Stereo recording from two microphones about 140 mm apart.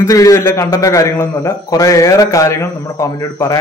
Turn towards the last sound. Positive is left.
turn(degrees=20)  # may be behind; listen again after turning